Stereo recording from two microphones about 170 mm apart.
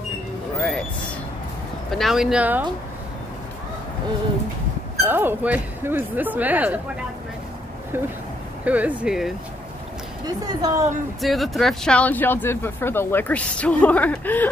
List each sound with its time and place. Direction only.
0.6 s a sound: 5° left (ahead or behind)
1.9 s speech: centre (ahead or behind)
5.0 s speech: 10° right (ahead or behind)
8.6 s speech: 10° right (ahead or behind)
10.2 s a woman's voice: 20° right (ahead or behind)
11.1 s speech: centre (ahead or behind)